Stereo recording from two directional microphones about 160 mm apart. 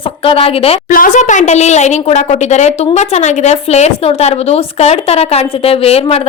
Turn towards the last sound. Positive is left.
turn(degrees=40)  # may be behind; listen again after turning